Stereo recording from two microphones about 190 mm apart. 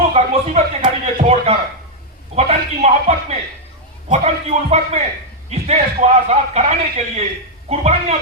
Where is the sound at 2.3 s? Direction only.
35° right (ahead or behind).